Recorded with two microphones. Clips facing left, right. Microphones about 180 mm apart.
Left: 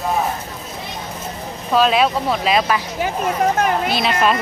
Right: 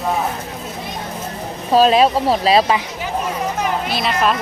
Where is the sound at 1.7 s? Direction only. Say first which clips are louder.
Right 3 dB; 35° right (ahead or behind).